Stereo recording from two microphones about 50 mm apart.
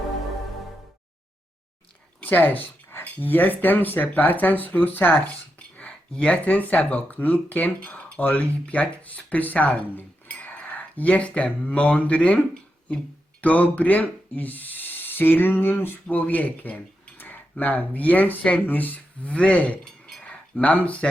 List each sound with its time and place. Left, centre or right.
2.2 s speech: left
3.0 s owl: left
5.5 s speech: left
13.4 s owl: left
17.2 s tick-tock: left
17.6 s owl: left
19.3 s a sound: left
19.8 s a sound: centre
20.2 s speech: left